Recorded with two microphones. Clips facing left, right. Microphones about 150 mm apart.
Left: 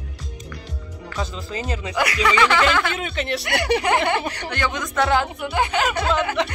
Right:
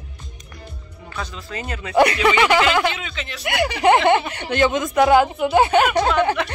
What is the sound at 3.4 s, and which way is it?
Speech, 25° right (ahead or behind).